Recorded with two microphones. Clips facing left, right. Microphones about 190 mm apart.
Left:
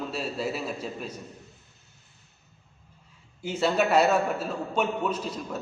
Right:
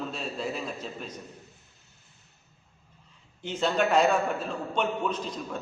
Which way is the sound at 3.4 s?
10° left (ahead or behind).